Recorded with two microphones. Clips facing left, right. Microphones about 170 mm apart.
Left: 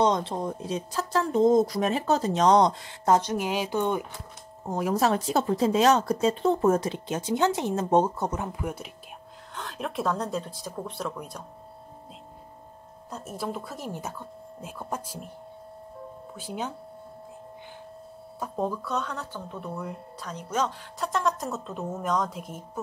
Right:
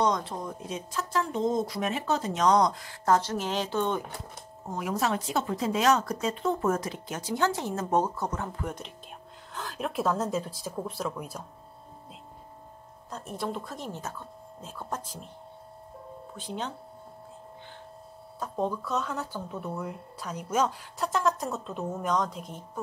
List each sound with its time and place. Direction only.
0.0 s speech: 25° left (ahead or behind)
4.6 s speech: 40° left (ahead or behind); by 11.4 s 5° right (ahead or behind)
13.1 s speech: 5° left (ahead or behind)
16.3 s speech: 10° left (ahead or behind)
18.4 s speech: 5° left (ahead or behind)